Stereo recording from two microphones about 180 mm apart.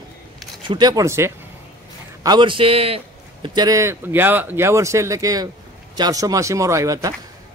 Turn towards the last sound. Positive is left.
turn(degrees=-20)  # may be behind; listen again after turning